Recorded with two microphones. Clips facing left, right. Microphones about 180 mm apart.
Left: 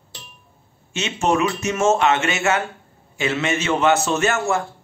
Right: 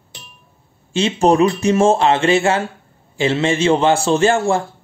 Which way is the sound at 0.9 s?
35° right (ahead or behind).